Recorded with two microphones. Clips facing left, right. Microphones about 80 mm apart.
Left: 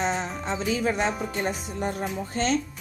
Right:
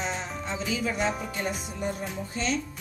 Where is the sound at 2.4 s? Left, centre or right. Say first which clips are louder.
Left 4 dB; left.